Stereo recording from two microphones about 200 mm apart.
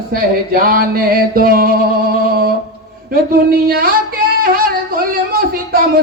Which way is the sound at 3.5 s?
50° right (ahead or behind).